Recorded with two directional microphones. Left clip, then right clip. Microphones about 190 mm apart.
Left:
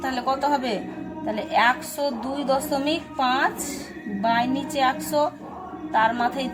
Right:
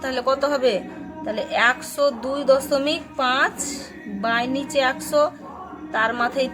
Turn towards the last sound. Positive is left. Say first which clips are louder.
# right 1 dB
turn(degrees=-25)  # may be behind; listen again after turning